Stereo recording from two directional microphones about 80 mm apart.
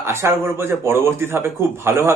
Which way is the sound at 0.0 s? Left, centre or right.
Right.